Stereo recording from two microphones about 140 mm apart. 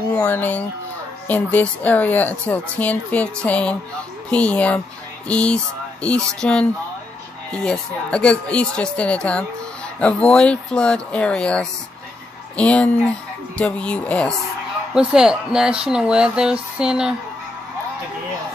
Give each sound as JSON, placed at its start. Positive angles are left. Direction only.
{"t": 0.1, "sound": "a woman's voice", "side_deg": 10}
{"t": 15.0, "sound": "speech", "side_deg": -5}